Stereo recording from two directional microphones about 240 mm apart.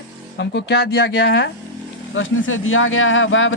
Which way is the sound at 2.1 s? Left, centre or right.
Left.